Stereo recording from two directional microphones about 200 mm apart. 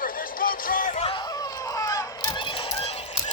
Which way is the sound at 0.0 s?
45° left (ahead or behind).